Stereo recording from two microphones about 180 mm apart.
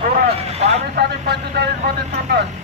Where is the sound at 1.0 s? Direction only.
70° right (ahead or behind).